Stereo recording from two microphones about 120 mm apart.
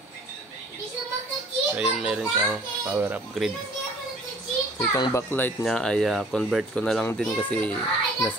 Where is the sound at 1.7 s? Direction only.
10° right (ahead or behind).